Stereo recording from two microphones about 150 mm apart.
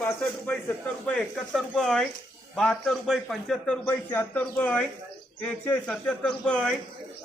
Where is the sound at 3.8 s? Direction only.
15° left (ahead or behind).